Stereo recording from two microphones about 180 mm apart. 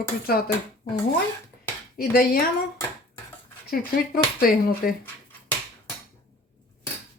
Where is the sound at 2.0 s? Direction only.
55° left (ahead or behind).